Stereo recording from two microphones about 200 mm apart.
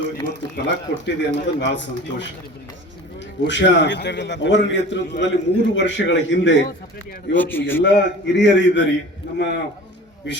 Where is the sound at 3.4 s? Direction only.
65° left (ahead or behind).